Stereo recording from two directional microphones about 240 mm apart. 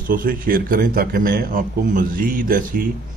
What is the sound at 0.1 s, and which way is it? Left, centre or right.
A man's voice, right.